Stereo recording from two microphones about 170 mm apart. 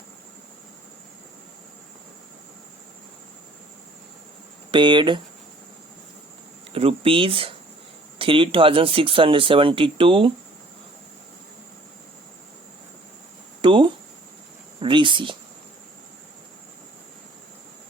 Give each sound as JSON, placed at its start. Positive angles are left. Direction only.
{"t": 4.7, "sound": "speech", "side_deg": -30}
{"t": 6.7, "sound": "speech", "side_deg": -35}
{"t": 13.6, "sound": "speech", "side_deg": -30}